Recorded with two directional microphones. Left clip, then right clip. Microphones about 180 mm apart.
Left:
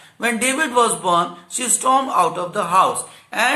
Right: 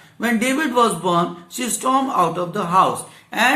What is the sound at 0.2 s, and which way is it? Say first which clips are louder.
Speech: left 1 dB; 20° left (ahead or behind).